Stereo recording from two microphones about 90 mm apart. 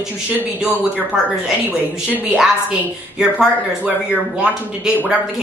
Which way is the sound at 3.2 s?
5° right (ahead or behind).